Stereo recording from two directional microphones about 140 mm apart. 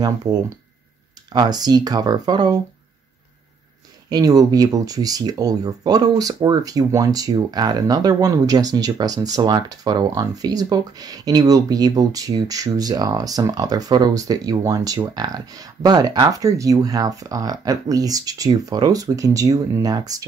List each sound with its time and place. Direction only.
0.0 s speech: 30° right (ahead or behind)
4.1 s speech: 25° right (ahead or behind)